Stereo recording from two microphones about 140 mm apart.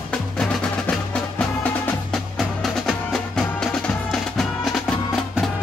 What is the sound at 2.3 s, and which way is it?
Music, centre (ahead or behind).